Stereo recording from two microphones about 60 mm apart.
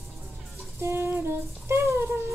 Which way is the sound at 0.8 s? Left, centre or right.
Right.